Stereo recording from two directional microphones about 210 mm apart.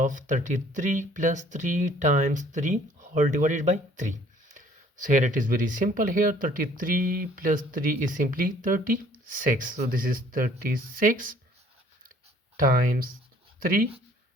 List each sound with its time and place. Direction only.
0.0 s speech: 35° right (ahead or behind)
12.5 s speech: 40° right (ahead or behind)